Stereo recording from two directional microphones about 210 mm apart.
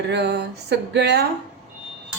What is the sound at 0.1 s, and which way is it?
Speech, 55° right (ahead or behind).